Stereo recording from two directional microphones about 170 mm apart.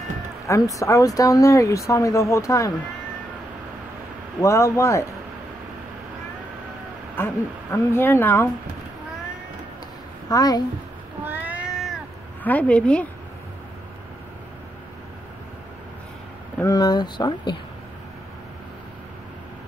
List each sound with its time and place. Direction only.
0.5 s speech: 20° left (ahead or behind)
4.4 s speech: 20° left (ahead or behind)
7.2 s speech: 15° left (ahead or behind)
10.3 s speech: 20° left (ahead or behind)
11.2 s cat: 10° right (ahead or behind)
12.4 s speech: 10° left (ahead or behind)
16.5 s speech: 20° left (ahead or behind)